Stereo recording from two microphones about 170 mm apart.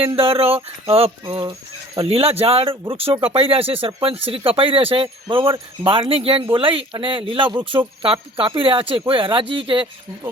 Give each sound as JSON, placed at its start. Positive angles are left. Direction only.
{"t": 0.2, "sound": "speech", "side_deg": -35}